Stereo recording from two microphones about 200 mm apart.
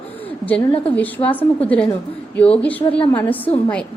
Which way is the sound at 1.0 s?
10° left (ahead or behind).